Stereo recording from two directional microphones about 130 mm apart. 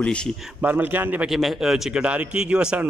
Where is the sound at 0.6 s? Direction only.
15° right (ahead or behind).